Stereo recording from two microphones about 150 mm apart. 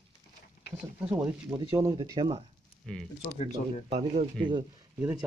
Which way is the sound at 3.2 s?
45° left (ahead or behind).